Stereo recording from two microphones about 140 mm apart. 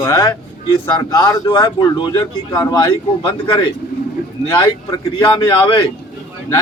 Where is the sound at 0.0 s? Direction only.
25° left (ahead or behind).